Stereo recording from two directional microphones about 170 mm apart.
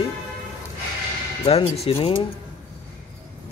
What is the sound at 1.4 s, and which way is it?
Speech, 35° left (ahead or behind).